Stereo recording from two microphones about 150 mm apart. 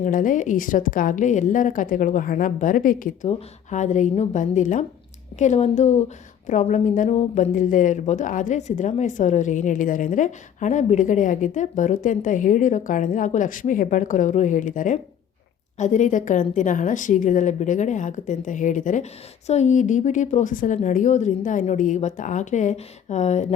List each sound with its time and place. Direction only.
0.0 s speech: 60° left (ahead or behind)
3.2 s a woman's voice: 50° left (ahead or behind)